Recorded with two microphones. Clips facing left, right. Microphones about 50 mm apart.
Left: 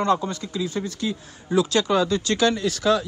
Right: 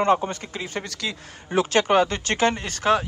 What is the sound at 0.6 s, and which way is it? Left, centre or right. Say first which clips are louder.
Speech: left 5 dB; right.